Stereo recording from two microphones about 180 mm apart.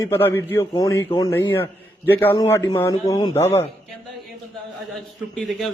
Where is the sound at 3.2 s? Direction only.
35° left (ahead or behind).